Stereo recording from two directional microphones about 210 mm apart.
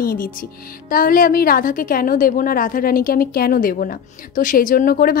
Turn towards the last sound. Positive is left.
turn(degrees=45)  # may be behind; listen again after turning